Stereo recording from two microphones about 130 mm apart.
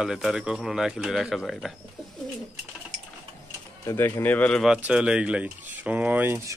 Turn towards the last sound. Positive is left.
turn(degrees=-10)  # may be behind; listen again after turning